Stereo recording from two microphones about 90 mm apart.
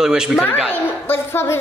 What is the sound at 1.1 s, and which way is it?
Speech, 25° left (ahead or behind).